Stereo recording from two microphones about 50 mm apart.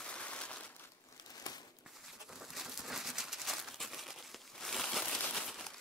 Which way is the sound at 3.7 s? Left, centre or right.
Centre.